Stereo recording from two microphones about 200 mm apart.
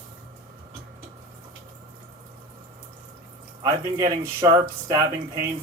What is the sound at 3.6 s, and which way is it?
A man's voice, 15° right (ahead or behind).